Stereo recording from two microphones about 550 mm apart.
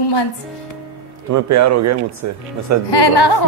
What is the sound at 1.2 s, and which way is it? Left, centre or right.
Speech, right.